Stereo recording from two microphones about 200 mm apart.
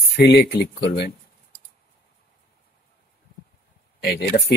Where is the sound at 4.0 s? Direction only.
55° left (ahead or behind).